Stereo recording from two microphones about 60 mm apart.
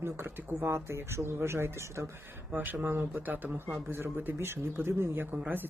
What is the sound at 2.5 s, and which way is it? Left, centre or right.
Speech, right.